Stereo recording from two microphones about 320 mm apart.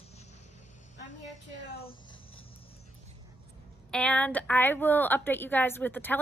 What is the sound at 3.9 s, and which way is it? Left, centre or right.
A woman's voice, centre.